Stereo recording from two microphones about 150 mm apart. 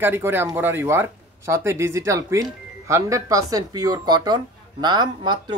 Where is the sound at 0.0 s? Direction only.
15° right (ahead or behind).